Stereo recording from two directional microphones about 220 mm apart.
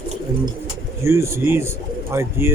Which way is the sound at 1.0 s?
10° right (ahead or behind).